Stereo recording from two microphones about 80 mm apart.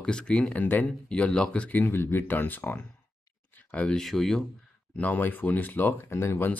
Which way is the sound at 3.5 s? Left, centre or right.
Centre.